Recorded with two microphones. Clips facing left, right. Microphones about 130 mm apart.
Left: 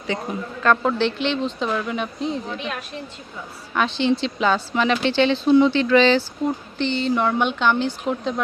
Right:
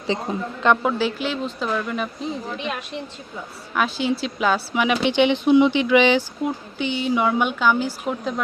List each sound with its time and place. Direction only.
0.1 s speech: 25° right (ahead or behind)
0.8 s speech: 5° right (ahead or behind)
3.8 s speech: 5° right (ahead or behind)